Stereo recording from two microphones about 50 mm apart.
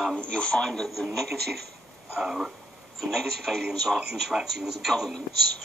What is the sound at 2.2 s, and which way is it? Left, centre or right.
Speech, centre.